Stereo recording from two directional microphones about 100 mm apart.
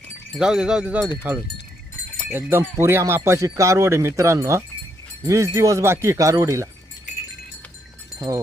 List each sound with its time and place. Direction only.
0.3 s speech: 5° right (ahead or behind)
2.3 s speech: 20° right (ahead or behind)